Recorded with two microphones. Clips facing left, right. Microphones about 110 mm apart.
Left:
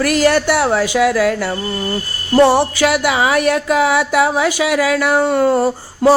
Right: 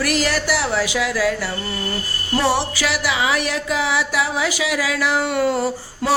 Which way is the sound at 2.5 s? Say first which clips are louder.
Left 8 dB; 55° left (ahead or behind).